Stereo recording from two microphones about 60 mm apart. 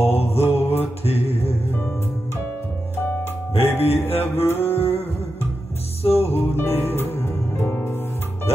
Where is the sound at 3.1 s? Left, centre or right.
Left.